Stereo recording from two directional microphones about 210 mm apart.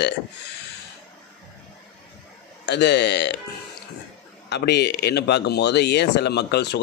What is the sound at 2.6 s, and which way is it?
Speech, 55° left (ahead or behind).